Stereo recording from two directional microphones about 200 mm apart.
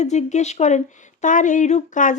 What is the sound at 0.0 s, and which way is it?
A woman's voice, 35° left (ahead or behind).